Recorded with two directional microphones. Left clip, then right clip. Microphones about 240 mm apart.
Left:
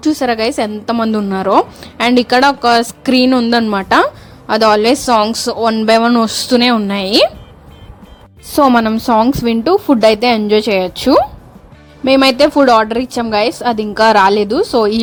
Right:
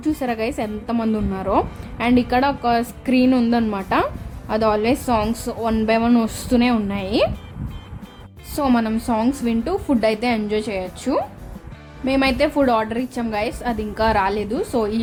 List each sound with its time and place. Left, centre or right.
0.0 s a woman's voice: centre
8.5 s a woman's voice: left